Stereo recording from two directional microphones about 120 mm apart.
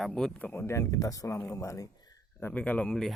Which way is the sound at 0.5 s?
20° left (ahead or behind).